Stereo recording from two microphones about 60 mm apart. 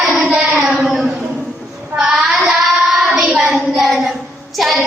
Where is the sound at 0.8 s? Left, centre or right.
Centre.